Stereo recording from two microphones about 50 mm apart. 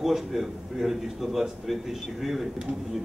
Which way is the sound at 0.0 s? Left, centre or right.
Centre.